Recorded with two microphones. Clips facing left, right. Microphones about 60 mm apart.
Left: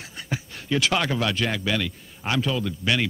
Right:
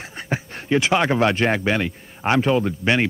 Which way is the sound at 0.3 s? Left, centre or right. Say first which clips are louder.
Right 5 dB; right.